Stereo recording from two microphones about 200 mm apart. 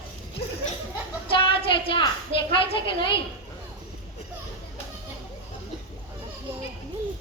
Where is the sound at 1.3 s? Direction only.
25° left (ahead or behind).